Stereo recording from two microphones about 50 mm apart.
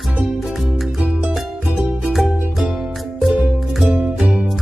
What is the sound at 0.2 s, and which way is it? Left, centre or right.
Music, centre.